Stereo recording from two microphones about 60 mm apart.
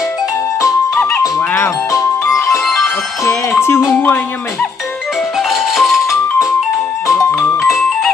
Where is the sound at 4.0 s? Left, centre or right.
Left.